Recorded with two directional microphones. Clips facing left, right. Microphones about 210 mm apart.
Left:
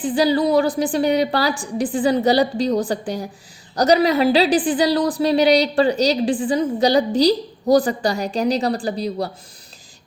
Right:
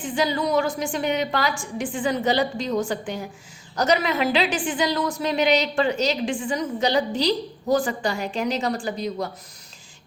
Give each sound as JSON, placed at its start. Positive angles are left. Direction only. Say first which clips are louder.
{"t": 0.0, "sound": "a woman's voice", "louder": "left 7 dB", "side_deg": 35}